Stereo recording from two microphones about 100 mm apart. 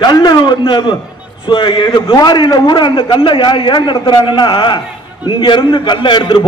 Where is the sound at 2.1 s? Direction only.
45° left (ahead or behind).